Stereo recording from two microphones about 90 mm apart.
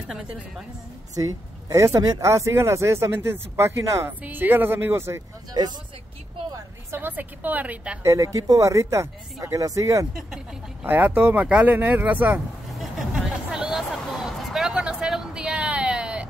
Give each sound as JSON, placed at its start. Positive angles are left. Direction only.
{"t": 0.1, "sound": "a woman's voice", "side_deg": -10}
{"t": 1.1, "sound": "speech", "side_deg": -40}
{"t": 4.2, "sound": "speech", "side_deg": -20}
{"t": 5.5, "sound": "speech", "side_deg": -50}
{"t": 6.9, "sound": "speech", "side_deg": -20}
{"t": 8.0, "sound": "speech", "side_deg": -35}
{"t": 10.1, "sound": "speech", "side_deg": -10}
{"t": 10.9, "sound": "speech", "side_deg": -20}
{"t": 12.7, "sound": "hubbub", "side_deg": -5}
{"t": 14.0, "sound": "a sound", "side_deg": 0}